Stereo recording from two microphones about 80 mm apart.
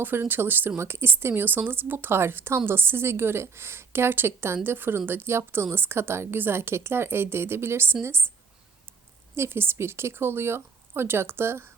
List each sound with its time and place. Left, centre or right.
0.0 s a woman's voice: right